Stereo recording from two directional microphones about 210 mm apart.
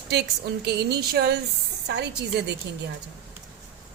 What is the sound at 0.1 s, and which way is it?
A woman's voice, 50° right (ahead or behind).